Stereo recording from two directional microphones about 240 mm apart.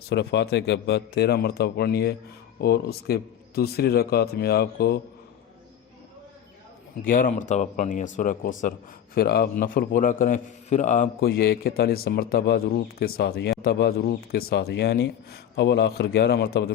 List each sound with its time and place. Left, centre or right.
0.1 s a man's voice: left
7.1 s a man's voice: left